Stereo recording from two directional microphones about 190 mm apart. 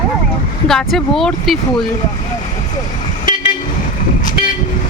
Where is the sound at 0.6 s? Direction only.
Centre (ahead or behind).